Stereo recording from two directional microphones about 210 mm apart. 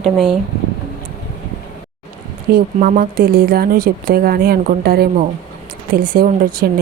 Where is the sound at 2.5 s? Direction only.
40° right (ahead or behind).